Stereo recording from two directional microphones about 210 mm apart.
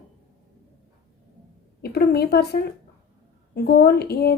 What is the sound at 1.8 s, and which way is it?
A woman's voice, 50° left (ahead or behind).